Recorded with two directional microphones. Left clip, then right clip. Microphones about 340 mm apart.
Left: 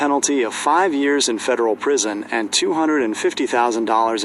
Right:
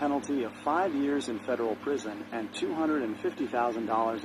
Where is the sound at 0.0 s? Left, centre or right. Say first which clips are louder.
Left 12 dB; left.